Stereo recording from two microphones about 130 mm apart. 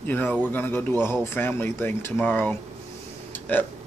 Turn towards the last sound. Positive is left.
turn(degrees=15)  # may be behind; listen again after turning